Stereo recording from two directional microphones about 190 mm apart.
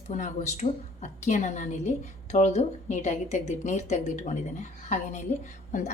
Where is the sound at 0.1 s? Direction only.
40° left (ahead or behind).